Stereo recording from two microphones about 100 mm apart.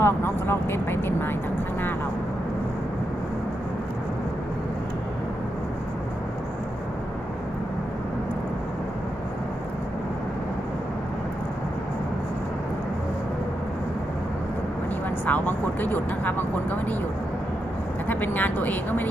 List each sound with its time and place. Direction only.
0.0 s speech: 25° left (ahead or behind)
15.3 s speech: 20° left (ahead or behind)
18.1 s speech: 15° left (ahead or behind)